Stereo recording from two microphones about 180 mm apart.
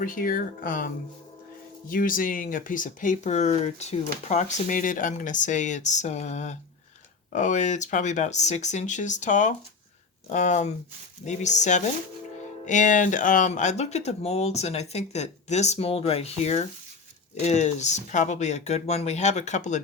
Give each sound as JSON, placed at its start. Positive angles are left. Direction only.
{"t": 0.0, "sound": "speech", "side_deg": 50}
{"t": 1.9, "sound": "speech", "side_deg": 50}